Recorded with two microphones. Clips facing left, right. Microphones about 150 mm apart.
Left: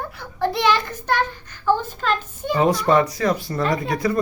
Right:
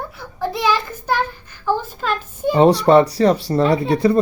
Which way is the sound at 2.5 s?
30° right (ahead or behind).